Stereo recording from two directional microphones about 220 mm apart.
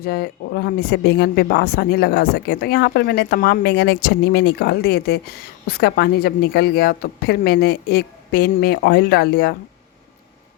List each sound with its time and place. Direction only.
0.0 s speech: 45° left (ahead or behind)